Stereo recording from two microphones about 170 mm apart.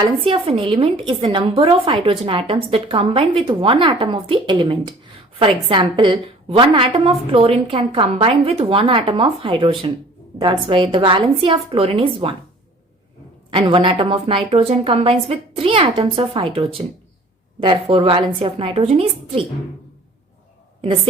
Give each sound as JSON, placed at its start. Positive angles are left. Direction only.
{"t": 0.3, "sound": "a woman's voice", "side_deg": -30}
{"t": 13.5, "sound": "a woman's voice", "side_deg": -30}
{"t": 20.8, "sound": "a woman's voice", "side_deg": -35}